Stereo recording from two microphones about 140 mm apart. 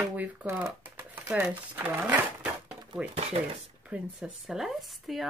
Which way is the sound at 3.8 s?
5° right (ahead or behind).